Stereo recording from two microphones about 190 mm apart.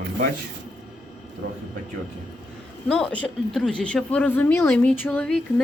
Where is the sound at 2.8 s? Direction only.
5° left (ahead or behind).